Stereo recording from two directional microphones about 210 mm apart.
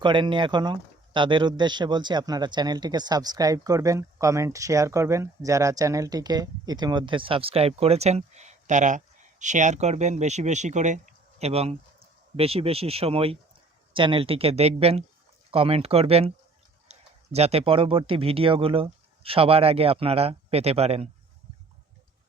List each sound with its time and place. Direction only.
0.0 s speech: 25° right (ahead or behind)